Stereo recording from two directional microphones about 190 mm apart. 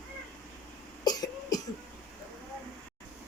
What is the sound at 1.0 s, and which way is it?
Cough, 20° left (ahead or behind).